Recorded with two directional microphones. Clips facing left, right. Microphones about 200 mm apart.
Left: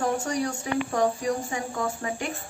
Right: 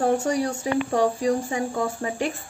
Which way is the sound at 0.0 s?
30° right (ahead or behind).